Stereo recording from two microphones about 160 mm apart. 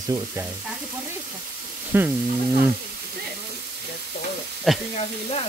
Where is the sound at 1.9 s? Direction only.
10° right (ahead or behind).